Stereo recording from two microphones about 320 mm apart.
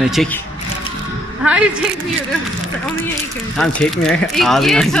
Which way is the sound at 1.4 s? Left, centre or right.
Centre.